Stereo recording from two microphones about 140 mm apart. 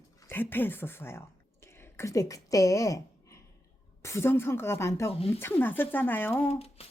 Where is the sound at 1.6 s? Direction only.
20° left (ahead or behind).